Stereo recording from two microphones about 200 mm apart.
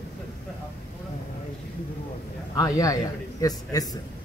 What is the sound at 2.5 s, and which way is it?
A man's voice, 15° left (ahead or behind).